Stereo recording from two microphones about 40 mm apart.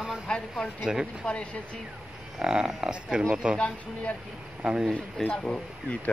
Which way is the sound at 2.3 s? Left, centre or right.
Centre.